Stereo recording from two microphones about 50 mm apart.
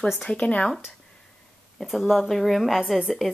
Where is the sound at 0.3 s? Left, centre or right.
Left.